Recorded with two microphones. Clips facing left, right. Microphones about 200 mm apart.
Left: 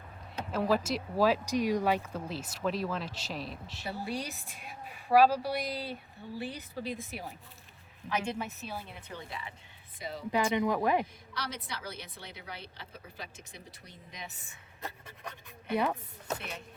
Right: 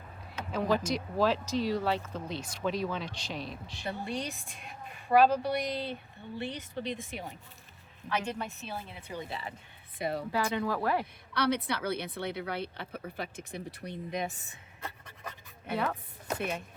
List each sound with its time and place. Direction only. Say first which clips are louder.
0.5 s a woman's voice: even; 5° left (ahead or behind)
9.1 s speech: right 5 dB; 10° right (ahead or behind)
10.0 s a woman's voice: right 7 dB; 60° right (ahead or behind)
10.3 s a woman's voice: left 6 dB; 15° left (ahead or behind)
11.0 s a woman's voice: right 9 dB; 60° right (ahead or behind)
15.7 s a woman's voice: left 2 dB; 15° left (ahead or behind)